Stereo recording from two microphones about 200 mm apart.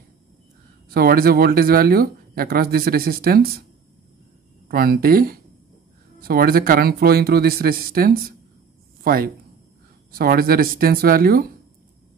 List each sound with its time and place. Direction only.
0.8 s speech: 50° right (ahead or behind)
4.6 s speech: 50° right (ahead or behind)